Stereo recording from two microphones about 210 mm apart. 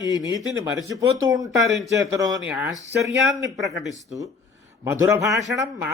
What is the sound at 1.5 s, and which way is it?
Mantra, centre (ahead or behind).